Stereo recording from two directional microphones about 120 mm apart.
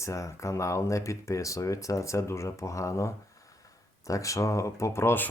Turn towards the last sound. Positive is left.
turn(degrees=20)  # may be behind; listen again after turning